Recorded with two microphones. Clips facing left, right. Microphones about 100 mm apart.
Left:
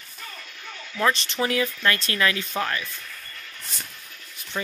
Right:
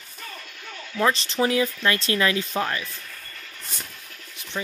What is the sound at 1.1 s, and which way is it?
Speech, 35° right (ahead or behind).